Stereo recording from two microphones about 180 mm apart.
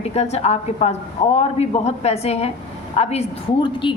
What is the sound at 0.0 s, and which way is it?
Speech, 35° left (ahead or behind).